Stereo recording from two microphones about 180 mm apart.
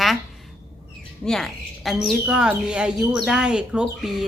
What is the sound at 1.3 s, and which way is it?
A woman's voice, centre (ahead or behind).